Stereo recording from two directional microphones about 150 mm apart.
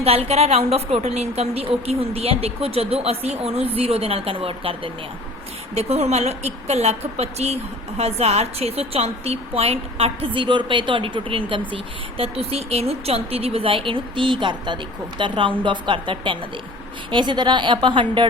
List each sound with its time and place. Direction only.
0.0 s a woman's voice: 45° right (ahead or behind)